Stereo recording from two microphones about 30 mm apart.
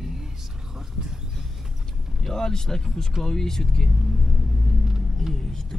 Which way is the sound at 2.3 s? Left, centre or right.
Centre.